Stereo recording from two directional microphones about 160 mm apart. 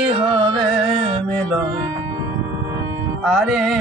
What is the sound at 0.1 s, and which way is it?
Carnatic music, 35° right (ahead or behind).